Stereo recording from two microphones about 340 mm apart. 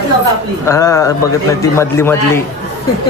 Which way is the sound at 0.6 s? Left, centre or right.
Centre.